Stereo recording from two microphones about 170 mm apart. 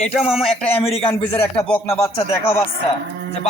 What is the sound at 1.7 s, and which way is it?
Speech, 5° left (ahead or behind).